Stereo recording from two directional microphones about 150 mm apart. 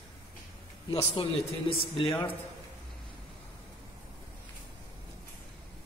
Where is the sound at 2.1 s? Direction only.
15° left (ahead or behind).